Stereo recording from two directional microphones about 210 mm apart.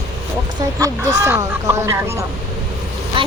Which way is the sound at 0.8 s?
15° right (ahead or behind).